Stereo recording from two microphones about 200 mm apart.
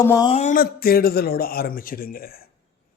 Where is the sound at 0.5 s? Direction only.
45° left (ahead or behind).